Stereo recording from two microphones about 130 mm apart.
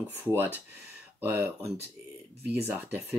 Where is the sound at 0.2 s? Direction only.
15° right (ahead or behind).